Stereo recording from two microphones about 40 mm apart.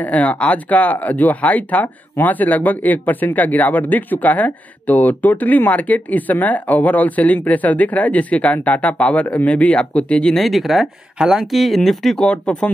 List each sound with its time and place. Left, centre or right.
0.0 s speech: left
10.4 s speech: centre
11.1 s speech: centre
11.5 s speech: centre
12.2 s speech: left